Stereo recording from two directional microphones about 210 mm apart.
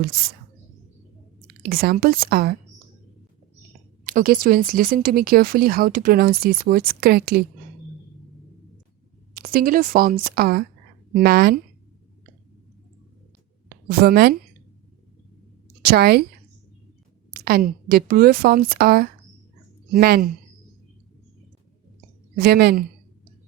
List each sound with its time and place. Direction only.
1.6 s speech: 45° right (ahead or behind)
4.0 s speech: 40° right (ahead or behind)
9.3 s speech: 45° right (ahead or behind)
13.7 s a woman's voice: 50° right (ahead or behind)
15.8 s a woman's voice: 45° right (ahead or behind)
17.3 s speech: 45° right (ahead or behind)
22.4 s speech: 45° right (ahead or behind)